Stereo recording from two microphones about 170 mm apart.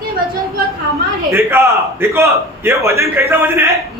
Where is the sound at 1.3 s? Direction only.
15° right (ahead or behind).